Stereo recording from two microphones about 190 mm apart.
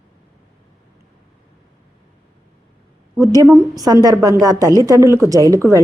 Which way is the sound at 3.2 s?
15° right (ahead or behind).